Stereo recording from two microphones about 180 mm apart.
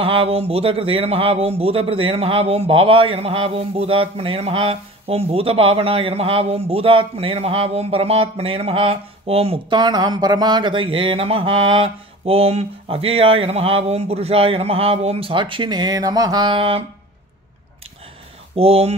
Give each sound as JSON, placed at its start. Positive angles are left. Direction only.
{"t": 0.0, "sound": "speech", "side_deg": -30}
{"t": 18.6, "sound": "speech", "side_deg": -35}